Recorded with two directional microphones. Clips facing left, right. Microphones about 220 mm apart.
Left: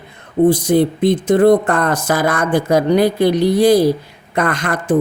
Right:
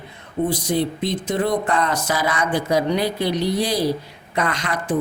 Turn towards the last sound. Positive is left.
turn(degrees=50)  # may be behind; listen again after turning